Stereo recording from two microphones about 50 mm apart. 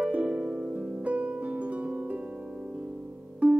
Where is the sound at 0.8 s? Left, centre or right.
Right.